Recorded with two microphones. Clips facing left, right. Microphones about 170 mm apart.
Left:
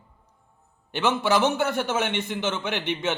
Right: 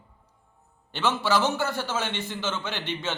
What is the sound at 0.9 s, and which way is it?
A man's voice, 15° left (ahead or behind).